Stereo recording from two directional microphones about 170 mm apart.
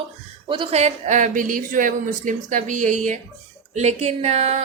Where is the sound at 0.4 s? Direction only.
30° right (ahead or behind).